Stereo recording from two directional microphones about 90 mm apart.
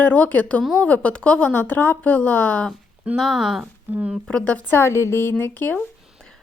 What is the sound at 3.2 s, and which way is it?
Speech, 5° right (ahead or behind).